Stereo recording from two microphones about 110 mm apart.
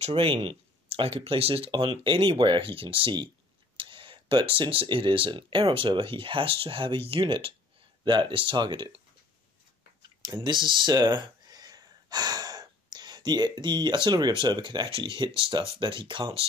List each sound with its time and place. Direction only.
0.1 s speech: 55° right (ahead or behind)
1.7 s speech: 45° right (ahead or behind)
10.2 s speech: 40° right (ahead or behind)
14.9 s speech: 55° right (ahead or behind)